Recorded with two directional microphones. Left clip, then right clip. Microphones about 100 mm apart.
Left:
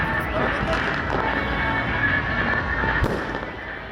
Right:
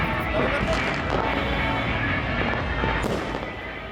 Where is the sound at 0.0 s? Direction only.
20° right (ahead or behind).